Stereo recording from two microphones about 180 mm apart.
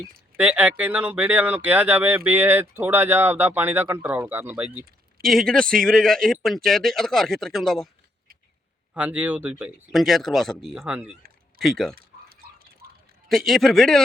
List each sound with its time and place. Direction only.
0.3 s speech: 10° right (ahead or behind)
9.0 s speech: 5° right (ahead or behind)
11.9 s a sound: 55° right (ahead or behind)
13.2 s speech: centre (ahead or behind)